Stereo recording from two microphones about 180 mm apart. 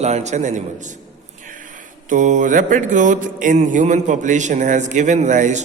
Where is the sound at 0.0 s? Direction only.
40° right (ahead or behind).